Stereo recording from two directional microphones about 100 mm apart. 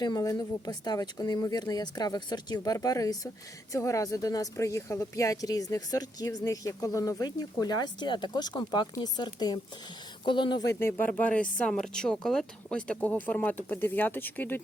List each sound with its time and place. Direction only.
0.0 s speech: 40° left (ahead or behind)
10.7 s speech: 25° left (ahead or behind)